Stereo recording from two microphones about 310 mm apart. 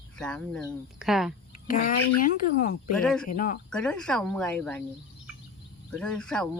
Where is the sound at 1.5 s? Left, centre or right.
Left.